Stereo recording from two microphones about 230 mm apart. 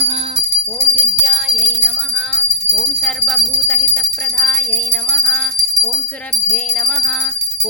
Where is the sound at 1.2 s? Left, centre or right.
Centre.